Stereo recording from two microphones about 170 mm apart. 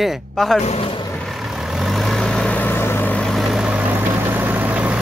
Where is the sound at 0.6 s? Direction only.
35° left (ahead or behind).